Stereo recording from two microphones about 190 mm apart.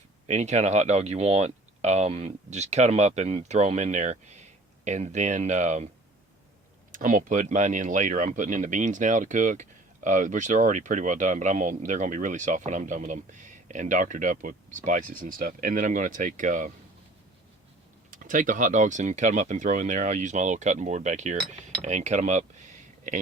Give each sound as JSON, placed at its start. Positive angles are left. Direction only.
{"t": 0.3, "sound": "speech", "side_deg": -35}
{"t": 6.9, "sound": "speech", "side_deg": -45}
{"t": 18.1, "sound": "speech", "side_deg": -45}